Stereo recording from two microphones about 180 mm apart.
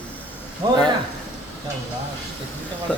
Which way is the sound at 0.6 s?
25° right (ahead or behind).